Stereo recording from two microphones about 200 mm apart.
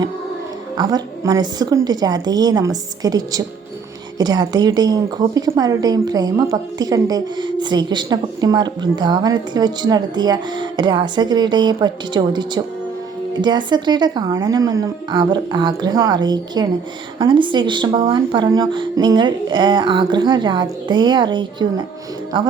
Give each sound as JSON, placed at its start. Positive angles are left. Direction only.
{"t": 0.8, "sound": "a woman's voice", "side_deg": -20}